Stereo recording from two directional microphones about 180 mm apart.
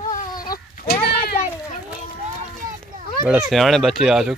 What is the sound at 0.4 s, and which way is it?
Goat, 55° left (ahead or behind).